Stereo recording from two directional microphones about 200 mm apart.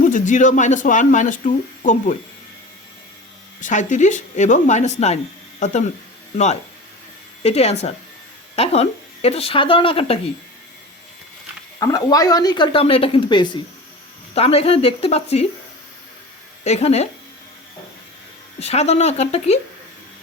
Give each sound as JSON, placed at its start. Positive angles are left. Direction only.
{"t": 0.0, "sound": "speech", "side_deg": 40}
{"t": 3.6, "sound": "speech", "side_deg": 40}
{"t": 11.8, "sound": "speech", "side_deg": 15}
{"t": 16.6, "sound": "speech", "side_deg": 35}
{"t": 18.6, "sound": "speech", "side_deg": 30}